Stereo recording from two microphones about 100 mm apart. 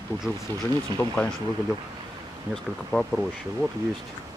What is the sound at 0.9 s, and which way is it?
Speech, 15° left (ahead or behind).